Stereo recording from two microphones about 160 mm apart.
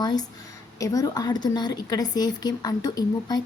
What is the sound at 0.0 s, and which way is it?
A woman's voice, 25° left (ahead or behind).